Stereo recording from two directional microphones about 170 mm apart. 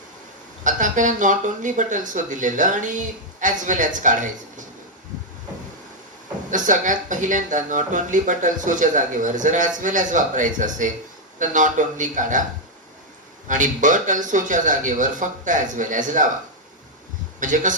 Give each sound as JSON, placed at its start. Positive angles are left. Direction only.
{"t": 0.6, "sound": "speech", "side_deg": -50}
{"t": 6.5, "sound": "speech", "side_deg": -50}
{"t": 13.5, "sound": "speech", "side_deg": -50}
{"t": 17.4, "sound": "speech", "side_deg": -50}